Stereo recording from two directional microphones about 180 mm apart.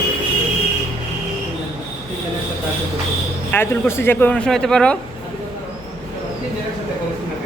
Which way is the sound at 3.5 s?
15° left (ahead or behind).